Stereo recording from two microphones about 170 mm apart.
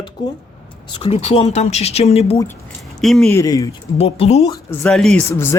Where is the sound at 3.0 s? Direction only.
Centre (ahead or behind).